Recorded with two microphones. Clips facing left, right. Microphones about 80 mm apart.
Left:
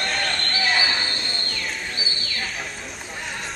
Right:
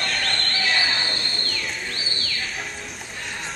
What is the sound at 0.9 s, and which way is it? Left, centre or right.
Bird, centre.